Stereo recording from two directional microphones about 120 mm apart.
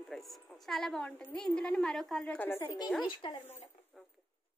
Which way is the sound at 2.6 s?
35° left (ahead or behind).